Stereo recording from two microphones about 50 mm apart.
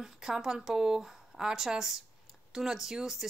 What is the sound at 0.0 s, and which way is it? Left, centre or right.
Speech, centre.